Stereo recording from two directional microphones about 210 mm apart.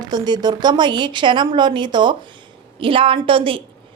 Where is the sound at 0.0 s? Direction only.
20° right (ahead or behind).